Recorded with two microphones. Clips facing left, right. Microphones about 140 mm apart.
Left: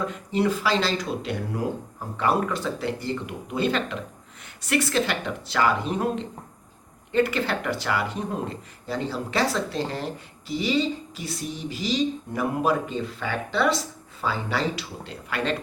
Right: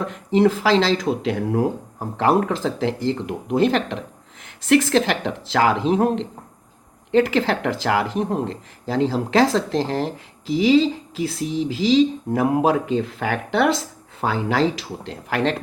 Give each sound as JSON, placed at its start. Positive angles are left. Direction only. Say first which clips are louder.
{"t": 0.0, "sound": "speech", "louder": "right 7 dB", "side_deg": -90}
{"t": 2.1, "sound": "speech", "louder": "right 5 dB", "side_deg": -90}
{"t": 7.1, "sound": "speech", "louder": "right 5 dB", "side_deg": -90}